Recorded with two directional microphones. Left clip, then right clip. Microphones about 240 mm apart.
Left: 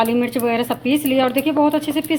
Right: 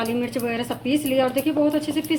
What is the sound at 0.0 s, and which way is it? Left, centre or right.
Speech, left.